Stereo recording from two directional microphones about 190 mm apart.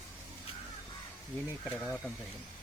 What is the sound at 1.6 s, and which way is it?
Speech, 5° left (ahead or behind).